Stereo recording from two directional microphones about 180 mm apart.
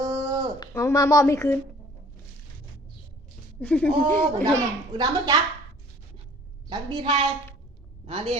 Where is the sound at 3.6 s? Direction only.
10° left (ahead or behind).